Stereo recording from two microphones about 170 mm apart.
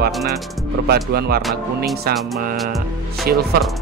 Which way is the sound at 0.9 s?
65° right (ahead or behind).